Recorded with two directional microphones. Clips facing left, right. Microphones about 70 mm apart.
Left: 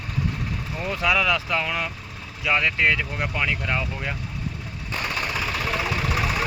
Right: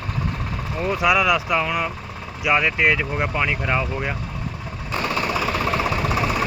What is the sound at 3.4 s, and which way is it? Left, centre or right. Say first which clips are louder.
Speech: right 2 dB; centre.